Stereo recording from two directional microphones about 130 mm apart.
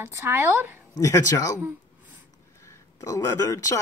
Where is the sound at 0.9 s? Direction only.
25° left (ahead or behind).